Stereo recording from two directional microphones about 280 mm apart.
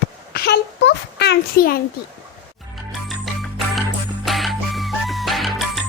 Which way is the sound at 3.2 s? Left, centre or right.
Centre.